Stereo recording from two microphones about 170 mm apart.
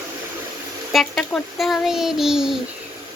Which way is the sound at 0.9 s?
Centre (ahead or behind).